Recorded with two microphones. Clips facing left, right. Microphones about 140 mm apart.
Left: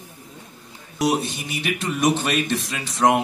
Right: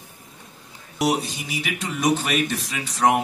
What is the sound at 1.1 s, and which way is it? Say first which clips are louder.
Speech: left 1 dB; 25° left (ahead or behind).